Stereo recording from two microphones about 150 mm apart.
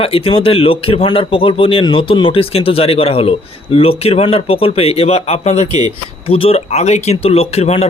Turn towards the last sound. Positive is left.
turn(degrees=45)  # may be behind; listen again after turning